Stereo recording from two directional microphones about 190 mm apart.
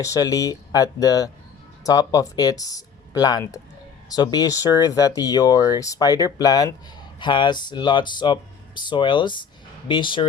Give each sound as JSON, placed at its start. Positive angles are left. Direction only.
{"t": 0.0, "sound": "speech", "side_deg": 15}